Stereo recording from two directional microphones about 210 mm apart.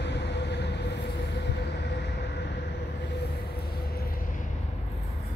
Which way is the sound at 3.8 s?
45° left (ahead or behind).